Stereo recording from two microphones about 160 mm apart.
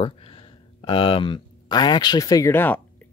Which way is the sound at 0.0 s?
35° left (ahead or behind).